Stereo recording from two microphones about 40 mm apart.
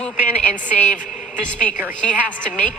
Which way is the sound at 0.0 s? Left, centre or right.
Left.